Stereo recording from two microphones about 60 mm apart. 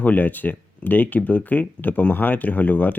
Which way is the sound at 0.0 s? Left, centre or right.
Left.